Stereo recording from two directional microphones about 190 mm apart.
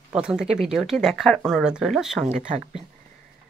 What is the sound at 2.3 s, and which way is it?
Speech, 35° right (ahead or behind).